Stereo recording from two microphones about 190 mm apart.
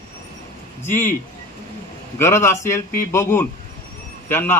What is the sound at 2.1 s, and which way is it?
A man's voice, 15° left (ahead or behind).